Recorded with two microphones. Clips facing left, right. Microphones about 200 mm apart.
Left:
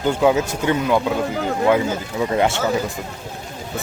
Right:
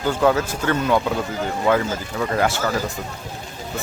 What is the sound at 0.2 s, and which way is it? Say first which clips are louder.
Speech: even; 15° left (ahead or behind).